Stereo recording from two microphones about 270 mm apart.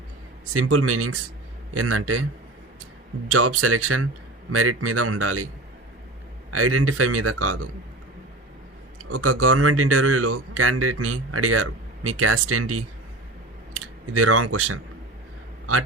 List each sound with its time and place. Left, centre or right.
0.5 s a man's voice: right
3.3 s a man's voice: right
6.5 s a man's voice: right
9.0 s speech: right
14.1 s speech: right